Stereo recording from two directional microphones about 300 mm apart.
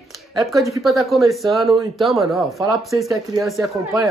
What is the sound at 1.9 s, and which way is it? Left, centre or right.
Speech, centre.